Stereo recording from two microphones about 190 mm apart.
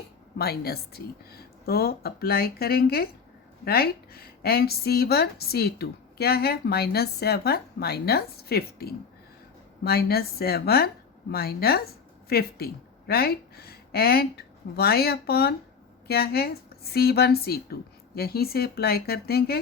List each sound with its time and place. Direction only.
0.3 s a woman's voice: 55° left (ahead or behind)